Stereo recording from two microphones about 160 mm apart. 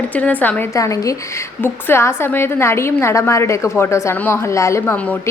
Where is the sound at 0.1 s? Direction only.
10° left (ahead or behind).